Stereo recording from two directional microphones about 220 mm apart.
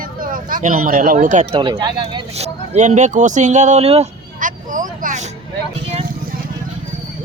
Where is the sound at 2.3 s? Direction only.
30° right (ahead or behind).